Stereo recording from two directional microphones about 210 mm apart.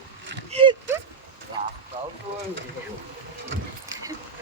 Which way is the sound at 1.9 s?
30° right (ahead or behind).